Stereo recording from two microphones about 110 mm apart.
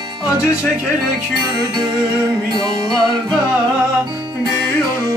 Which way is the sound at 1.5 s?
45° right (ahead or behind).